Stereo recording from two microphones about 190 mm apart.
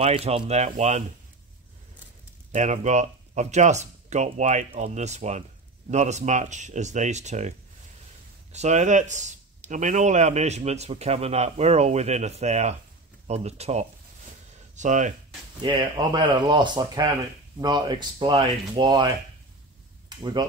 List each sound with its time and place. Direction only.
0.0 s speech: 30° right (ahead or behind)
2.5 s speech: 40° right (ahead or behind)
15.6 s speech: 25° right (ahead or behind)